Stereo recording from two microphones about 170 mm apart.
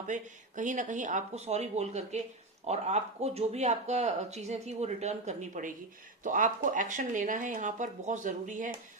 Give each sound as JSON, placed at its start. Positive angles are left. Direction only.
{"t": 0.1, "sound": "speech", "side_deg": -50}